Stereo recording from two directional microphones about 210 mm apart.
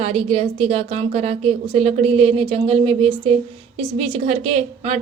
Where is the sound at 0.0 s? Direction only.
30° right (ahead or behind).